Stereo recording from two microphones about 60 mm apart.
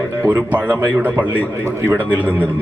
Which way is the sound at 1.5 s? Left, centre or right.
Right.